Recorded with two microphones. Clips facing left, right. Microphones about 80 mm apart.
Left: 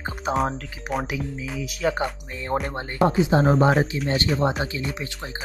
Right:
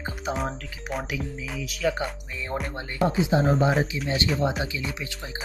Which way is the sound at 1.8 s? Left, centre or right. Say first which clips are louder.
Left 2 dB; left.